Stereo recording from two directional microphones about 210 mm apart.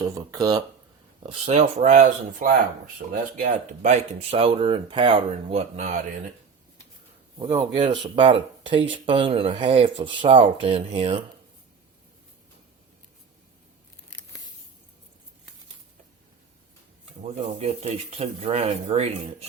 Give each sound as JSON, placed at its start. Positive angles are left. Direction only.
{"t": 0.0, "sound": "speech", "side_deg": -15}
{"t": 1.2, "sound": "speech", "side_deg": -30}
{"t": 7.3, "sound": "speech", "side_deg": -25}
{"t": 17.3, "sound": "speech", "side_deg": -30}